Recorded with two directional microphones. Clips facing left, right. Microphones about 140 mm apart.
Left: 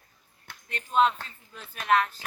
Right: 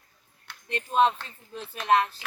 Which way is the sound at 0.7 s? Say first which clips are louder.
Right 1 dB; 25° right (ahead or behind).